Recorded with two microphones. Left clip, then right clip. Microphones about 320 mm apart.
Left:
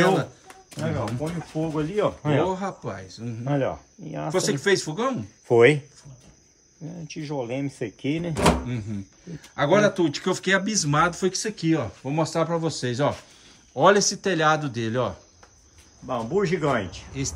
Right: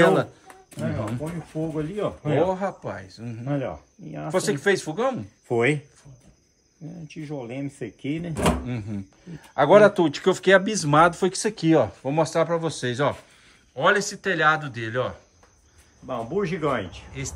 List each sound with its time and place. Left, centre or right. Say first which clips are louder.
0.0 s speech: right 3 dB; centre
3.4 s speech: left 3 dB; left
4.3 s speech: even; centre
5.5 s speech: left 6 dB; left
7.2 s speech: left 4 dB; left
8.3 s speech: left 3 dB; centre
16.1 s speech: left 3 dB; left